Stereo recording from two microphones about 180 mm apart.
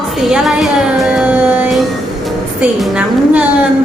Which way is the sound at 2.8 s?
5° right (ahead or behind).